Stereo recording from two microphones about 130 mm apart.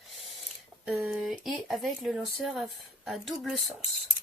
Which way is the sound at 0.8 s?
10° right (ahead or behind).